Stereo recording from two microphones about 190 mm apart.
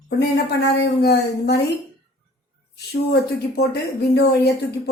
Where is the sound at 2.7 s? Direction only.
60° left (ahead or behind).